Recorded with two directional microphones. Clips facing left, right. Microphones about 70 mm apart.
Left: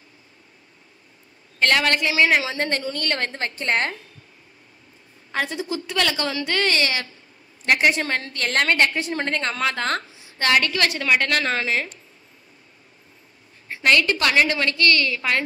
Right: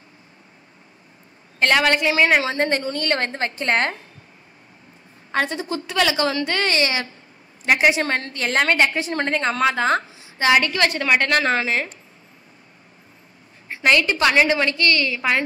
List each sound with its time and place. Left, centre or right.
1.6 s a woman's voice: centre
5.3 s a woman's voice: centre
13.8 s a woman's voice: centre